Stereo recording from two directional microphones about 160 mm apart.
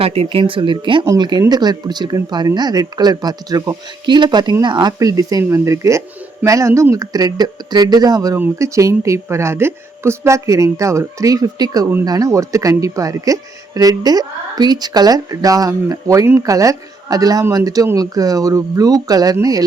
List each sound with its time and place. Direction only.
0.0 s speech: 40° right (ahead or behind); by 19.6 s 20° right (ahead or behind)